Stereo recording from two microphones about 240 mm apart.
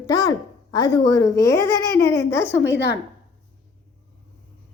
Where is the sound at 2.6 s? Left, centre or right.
Left.